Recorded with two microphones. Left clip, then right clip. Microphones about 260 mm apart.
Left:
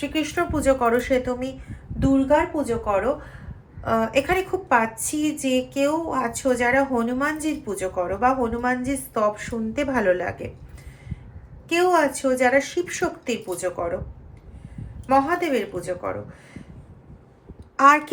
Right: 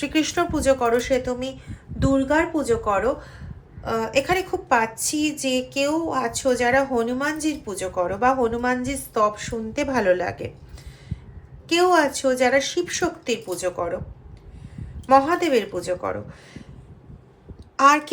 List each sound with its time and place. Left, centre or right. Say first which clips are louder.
0.0 s a woman's voice: right 2 dB; centre
0.5 s a woman's voice: left 1 dB; centre
2.1 s a woman's voice: left 1 dB; centre
3.8 s a woman's voice: left 1 dB; centre
5.9 s a woman's voice: right 1 dB; centre
6.9 s a woman's voice: even; centre
7.9 s a woman's voice: right 1 dB; centre
8.9 s a woman's voice: right 1 dB; centre
11.7 s a woman's voice: right 1 dB; centre
12.4 s a woman's voice: left 1 dB; centre
13.5 s a woman's voice: right 1 dB; centre
15.0 s a woman's voice: right 3 dB; right